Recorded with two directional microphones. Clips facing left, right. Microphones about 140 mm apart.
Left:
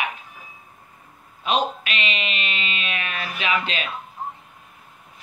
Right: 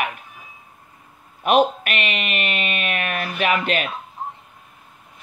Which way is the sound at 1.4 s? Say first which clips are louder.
Right 6 dB; 55° right (ahead or behind).